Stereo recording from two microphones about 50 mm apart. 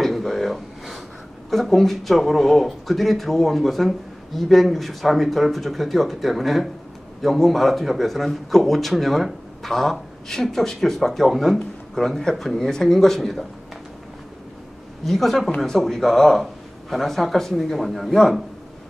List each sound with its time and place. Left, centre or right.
0.0 s a sound: centre
1.5 s a man's voice: centre
15.0 s a man's voice: centre